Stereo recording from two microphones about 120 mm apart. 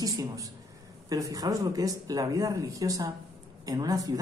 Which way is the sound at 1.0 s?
30° right (ahead or behind).